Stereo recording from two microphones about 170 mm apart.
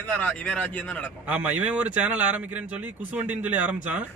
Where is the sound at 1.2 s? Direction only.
10° right (ahead or behind).